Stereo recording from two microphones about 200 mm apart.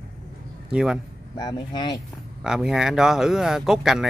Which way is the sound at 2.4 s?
5° right (ahead or behind).